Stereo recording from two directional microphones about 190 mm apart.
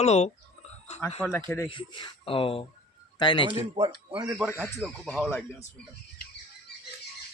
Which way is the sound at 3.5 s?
25° right (ahead or behind).